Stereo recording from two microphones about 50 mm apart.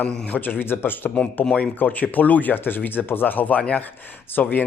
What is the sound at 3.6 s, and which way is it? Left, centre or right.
Speech, left.